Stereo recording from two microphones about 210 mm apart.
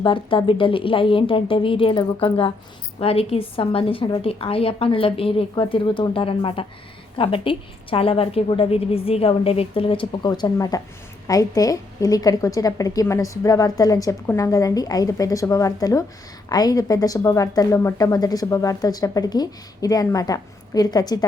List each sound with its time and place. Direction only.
0.0 s a woman's voice: 25° left (ahead or behind)